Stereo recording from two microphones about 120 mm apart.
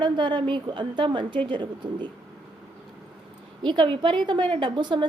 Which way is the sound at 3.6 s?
40° right (ahead or behind).